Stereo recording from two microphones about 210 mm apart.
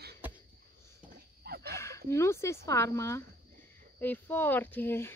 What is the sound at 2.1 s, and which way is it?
Speech, 15° left (ahead or behind).